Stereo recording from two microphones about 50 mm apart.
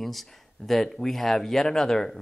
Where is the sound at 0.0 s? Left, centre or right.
Centre.